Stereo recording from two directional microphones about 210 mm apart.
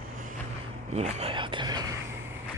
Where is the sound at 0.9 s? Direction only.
30° right (ahead or behind).